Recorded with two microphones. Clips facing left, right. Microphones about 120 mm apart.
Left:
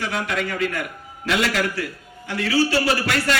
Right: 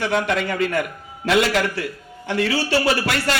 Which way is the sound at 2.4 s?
30° right (ahead or behind).